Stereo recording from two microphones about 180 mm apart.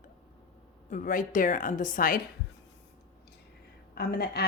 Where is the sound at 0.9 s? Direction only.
45° left (ahead or behind).